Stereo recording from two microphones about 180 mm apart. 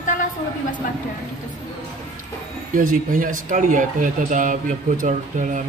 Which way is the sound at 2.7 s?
50° right (ahead or behind).